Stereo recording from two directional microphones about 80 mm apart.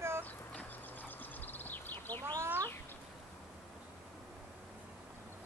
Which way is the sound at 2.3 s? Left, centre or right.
Right.